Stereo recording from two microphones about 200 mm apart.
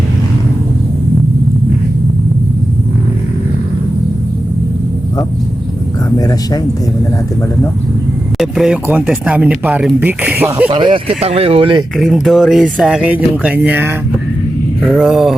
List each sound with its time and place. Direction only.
6.1 s speech: 20° left (ahead or behind)
8.4 s speech: centre (ahead or behind)
10.7 s speech: 25° right (ahead or behind)
11.9 s speech: centre (ahead or behind)